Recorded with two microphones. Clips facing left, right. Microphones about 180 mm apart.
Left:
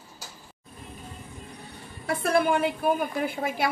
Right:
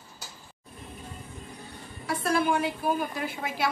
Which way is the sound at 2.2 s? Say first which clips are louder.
Left 3 dB; 60° left (ahead or behind).